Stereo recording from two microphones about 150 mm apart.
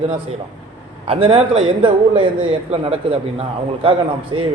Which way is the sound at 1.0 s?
35° right (ahead or behind).